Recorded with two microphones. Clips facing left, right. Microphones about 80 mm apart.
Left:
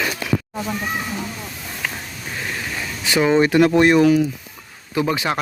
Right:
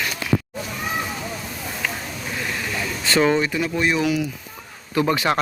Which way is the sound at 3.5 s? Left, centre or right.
Left.